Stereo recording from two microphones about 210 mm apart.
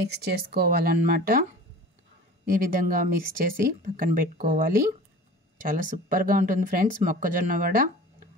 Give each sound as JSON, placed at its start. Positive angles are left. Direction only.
{"t": 0.0, "sound": "speech", "side_deg": -50}
{"t": 2.5, "sound": "speech", "side_deg": -40}